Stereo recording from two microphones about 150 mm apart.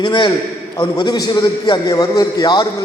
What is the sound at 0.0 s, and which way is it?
A man's voice, 30° left (ahead or behind).